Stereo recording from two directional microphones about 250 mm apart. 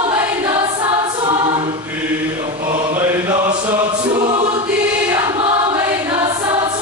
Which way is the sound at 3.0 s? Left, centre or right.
Centre.